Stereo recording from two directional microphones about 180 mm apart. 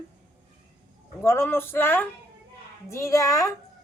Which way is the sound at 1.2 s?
15° left (ahead or behind).